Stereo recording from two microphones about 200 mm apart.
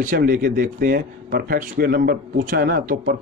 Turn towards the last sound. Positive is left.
turn(degrees=-50)  # may be behind; listen again after turning